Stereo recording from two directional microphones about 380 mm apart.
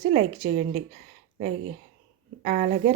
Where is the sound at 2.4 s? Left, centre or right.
Centre.